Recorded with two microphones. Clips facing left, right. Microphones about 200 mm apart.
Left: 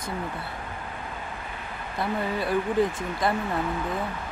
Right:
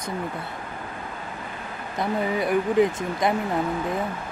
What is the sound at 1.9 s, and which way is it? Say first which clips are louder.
Speech: right 3 dB; 20° right (ahead or behind).